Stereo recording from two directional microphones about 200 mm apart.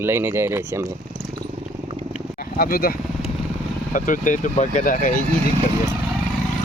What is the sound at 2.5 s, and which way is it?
Speech, 45° left (ahead or behind).